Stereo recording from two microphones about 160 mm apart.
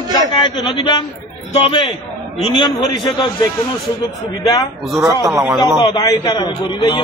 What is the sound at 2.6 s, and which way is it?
Speech, 25° left (ahead or behind).